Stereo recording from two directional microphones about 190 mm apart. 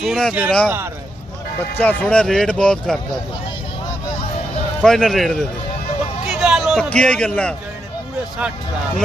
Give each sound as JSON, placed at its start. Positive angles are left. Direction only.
{"t": 0.0, "sound": "speech", "side_deg": 0}
{"t": 1.8, "sound": "speech", "side_deg": 10}
{"t": 4.8, "sound": "speech", "side_deg": 0}
{"t": 8.4, "sound": "speech", "side_deg": -5}